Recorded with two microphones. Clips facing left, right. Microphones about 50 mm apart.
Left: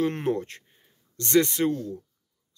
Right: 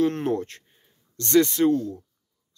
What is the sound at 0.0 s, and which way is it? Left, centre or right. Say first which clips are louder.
Speech: right 3 dB; centre.